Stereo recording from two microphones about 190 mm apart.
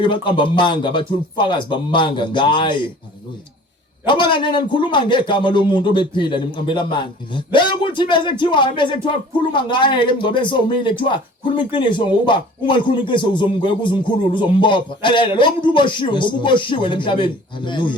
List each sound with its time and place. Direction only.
0.0 s a man's voice: 25° left (ahead or behind)
4.0 s a man's voice: 25° left (ahead or behind)